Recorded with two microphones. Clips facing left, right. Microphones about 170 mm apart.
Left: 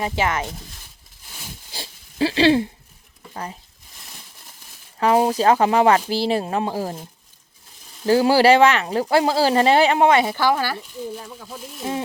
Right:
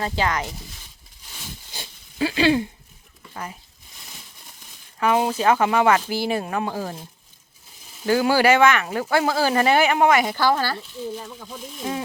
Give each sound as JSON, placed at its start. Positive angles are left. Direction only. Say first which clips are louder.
{"t": 0.0, "sound": "speech", "louder": "left 1 dB", "side_deg": 25}
{"t": 1.7, "sound": "a sound", "louder": "left 3 dB", "side_deg": 35}
{"t": 4.9, "sound": "speech", "louder": "left 3 dB", "side_deg": 30}
{"t": 8.0, "sound": "speech", "louder": "left 3 dB", "side_deg": 30}
{"t": 10.2, "sound": "speech", "louder": "left 1 dB", "side_deg": 15}